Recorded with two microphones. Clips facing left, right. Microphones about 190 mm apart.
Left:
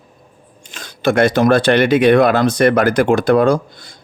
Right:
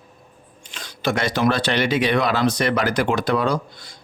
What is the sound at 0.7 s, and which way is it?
Speech, 50° left (ahead or behind).